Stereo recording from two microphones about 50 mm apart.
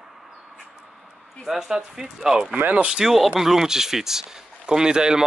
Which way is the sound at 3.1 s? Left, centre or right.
Centre.